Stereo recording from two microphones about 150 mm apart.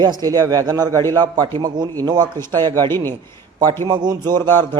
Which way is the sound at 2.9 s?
15° left (ahead or behind).